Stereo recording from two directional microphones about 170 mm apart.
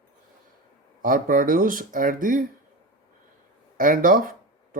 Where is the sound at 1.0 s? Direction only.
55° right (ahead or behind).